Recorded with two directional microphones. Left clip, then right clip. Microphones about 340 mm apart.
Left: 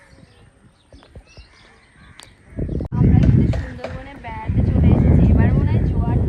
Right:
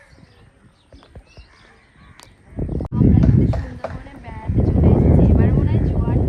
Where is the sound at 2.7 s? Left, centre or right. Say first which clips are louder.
Right 2 dB; centre.